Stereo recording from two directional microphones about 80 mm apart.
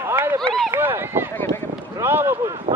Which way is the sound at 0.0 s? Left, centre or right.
Right.